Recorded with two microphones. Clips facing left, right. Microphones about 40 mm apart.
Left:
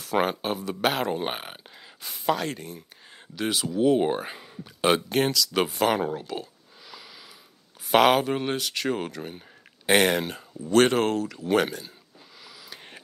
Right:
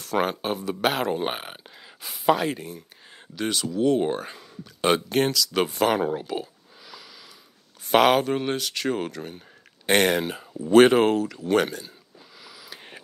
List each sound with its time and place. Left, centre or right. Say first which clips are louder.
0.0 s speech: even; centre
3.3 s speech: even; centre
4.8 s speech: right 1 dB; centre
7.9 s speech: right 1 dB; centre
10.5 s speech: right 5 dB; centre
12.4 s a sound: right 1 dB; centre